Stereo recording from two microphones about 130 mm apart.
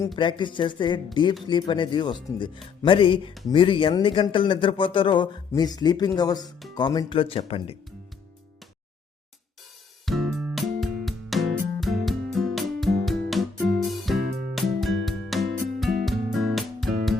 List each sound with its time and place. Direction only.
0.2 s speech: 35° left (ahead or behind)
10.1 s music: centre (ahead or behind)